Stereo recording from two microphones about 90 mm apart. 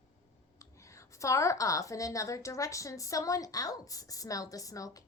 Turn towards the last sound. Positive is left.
turn(degrees=40)  # may be behind; listen again after turning